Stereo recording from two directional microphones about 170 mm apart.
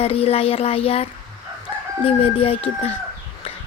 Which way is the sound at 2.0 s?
35° left (ahead or behind).